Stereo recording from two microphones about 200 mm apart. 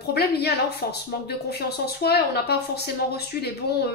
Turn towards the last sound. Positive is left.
turn(degrees=55)  # may be behind; listen again after turning